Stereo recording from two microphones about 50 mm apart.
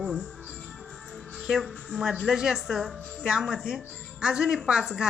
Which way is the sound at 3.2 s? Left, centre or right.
Centre.